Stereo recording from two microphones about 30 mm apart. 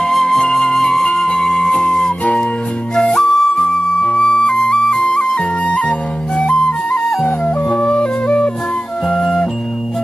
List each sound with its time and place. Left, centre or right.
0.0 s flute: centre
0.4 s flute: centre
5.0 s music: left
6.4 s flute: left
7.2 s music: left
7.8 s music: left
9.2 s music: left